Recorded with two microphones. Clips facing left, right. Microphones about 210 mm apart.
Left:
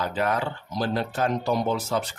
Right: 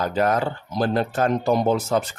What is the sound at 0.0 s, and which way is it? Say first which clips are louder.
Speech: right 5 dB; 40° right (ahead or behind).